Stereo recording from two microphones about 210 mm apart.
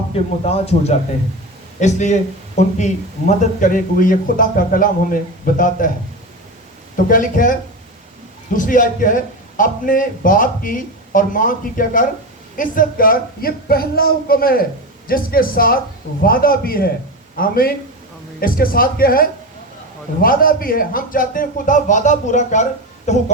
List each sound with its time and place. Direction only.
0.4 s a man's voice: 30° left (ahead or behind)
6.9 s a man's voice: 40° left (ahead or behind)
8.5 s a man's voice: 40° left (ahead or behind)